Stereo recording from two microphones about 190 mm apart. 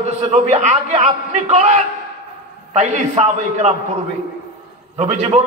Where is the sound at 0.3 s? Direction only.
35° right (ahead or behind).